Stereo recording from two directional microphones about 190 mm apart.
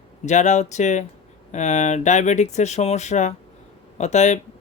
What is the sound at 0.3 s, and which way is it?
Speech, 40° left (ahead or behind).